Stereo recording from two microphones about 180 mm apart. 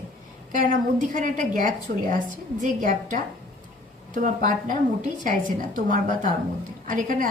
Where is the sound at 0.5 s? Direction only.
45° right (ahead or behind).